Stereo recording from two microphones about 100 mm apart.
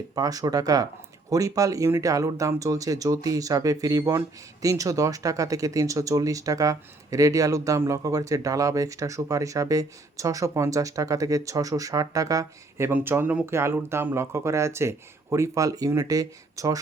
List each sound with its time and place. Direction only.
0.1 s speech: 40° right (ahead or behind)